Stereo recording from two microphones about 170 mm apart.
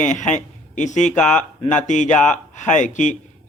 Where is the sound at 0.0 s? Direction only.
45° left (ahead or behind).